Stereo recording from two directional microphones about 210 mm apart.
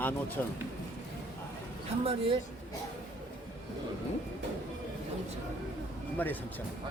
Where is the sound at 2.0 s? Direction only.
25° right (ahead or behind).